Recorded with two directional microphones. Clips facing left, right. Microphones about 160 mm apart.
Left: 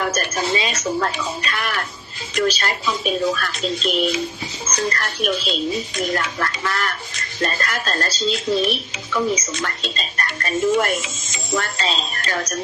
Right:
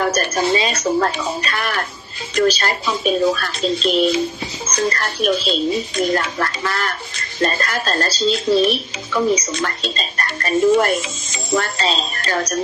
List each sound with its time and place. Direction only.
0.0 s speech: 35° right (ahead or behind)